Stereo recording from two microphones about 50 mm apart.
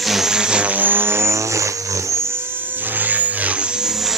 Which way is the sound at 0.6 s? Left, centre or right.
Right.